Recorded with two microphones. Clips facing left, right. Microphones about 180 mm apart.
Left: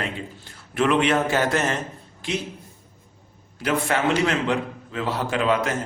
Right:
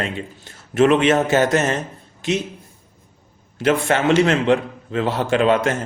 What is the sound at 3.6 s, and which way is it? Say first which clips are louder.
A man's voice: right 5 dB; 25° right (ahead or behind).